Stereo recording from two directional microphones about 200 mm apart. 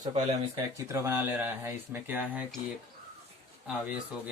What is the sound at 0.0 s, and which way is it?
Speech, 35° right (ahead or behind).